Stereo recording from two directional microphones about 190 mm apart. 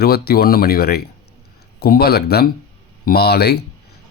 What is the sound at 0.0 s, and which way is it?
Speech, 55° left (ahead or behind).